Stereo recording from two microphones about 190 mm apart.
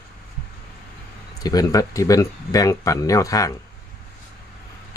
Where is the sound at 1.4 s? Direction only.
20° left (ahead or behind).